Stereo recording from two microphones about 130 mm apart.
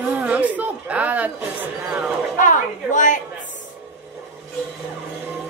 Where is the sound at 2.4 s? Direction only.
75° left (ahead or behind).